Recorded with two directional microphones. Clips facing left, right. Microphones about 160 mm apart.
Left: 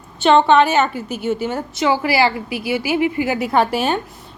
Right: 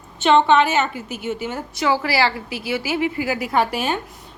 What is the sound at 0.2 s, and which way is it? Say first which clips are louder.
A woman's voice: left 2 dB; 35° left (ahead or behind).